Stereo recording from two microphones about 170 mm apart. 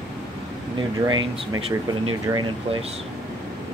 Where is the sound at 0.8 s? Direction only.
25° right (ahead or behind).